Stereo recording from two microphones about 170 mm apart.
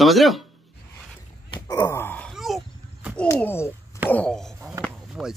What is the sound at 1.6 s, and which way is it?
Wail, 15° left (ahead or behind).